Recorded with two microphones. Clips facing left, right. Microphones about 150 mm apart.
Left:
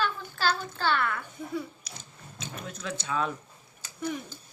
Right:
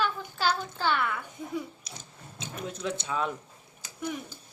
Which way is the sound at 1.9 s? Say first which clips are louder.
Right 1 dB; 30° right (ahead or behind).